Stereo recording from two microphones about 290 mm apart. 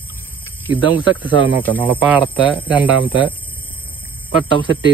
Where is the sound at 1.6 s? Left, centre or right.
Centre.